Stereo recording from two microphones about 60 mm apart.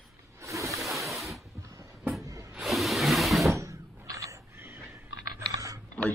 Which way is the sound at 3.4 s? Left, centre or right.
Right.